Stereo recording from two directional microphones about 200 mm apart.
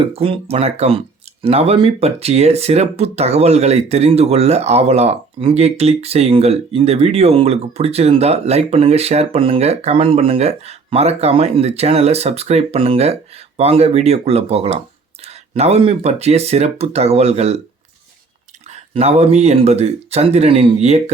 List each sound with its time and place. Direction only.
0.0 s speech: 30° right (ahead or behind)
18.7 s speech: 30° right (ahead or behind)